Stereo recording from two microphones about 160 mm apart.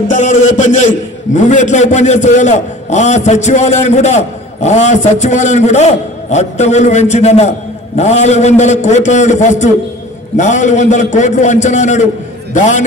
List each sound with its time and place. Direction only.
0.1 s a man's voice: 50° left (ahead or behind)